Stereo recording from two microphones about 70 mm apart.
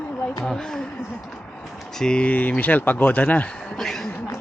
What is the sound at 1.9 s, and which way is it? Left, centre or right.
Speech, centre.